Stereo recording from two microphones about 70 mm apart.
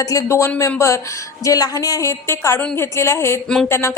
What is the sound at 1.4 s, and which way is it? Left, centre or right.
A woman's voice, left.